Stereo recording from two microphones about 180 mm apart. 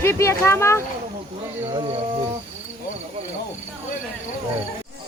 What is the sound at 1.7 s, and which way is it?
Cricket, 35° right (ahead or behind).